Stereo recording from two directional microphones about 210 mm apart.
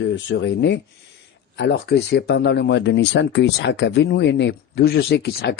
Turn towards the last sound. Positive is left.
turn(degrees=50)  # may be behind; listen again after turning